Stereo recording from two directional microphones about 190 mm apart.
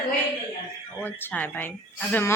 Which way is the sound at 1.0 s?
10° left (ahead or behind).